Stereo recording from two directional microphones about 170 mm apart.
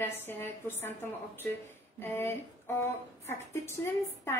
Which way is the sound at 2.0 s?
15° left (ahead or behind).